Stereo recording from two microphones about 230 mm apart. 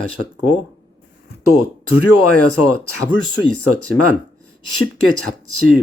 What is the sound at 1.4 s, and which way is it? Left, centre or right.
Speech, left.